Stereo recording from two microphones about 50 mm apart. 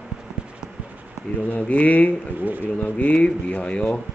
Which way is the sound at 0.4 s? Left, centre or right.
Centre.